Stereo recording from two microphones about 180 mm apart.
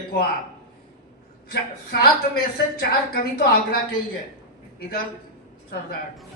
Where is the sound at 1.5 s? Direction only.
60° left (ahead or behind).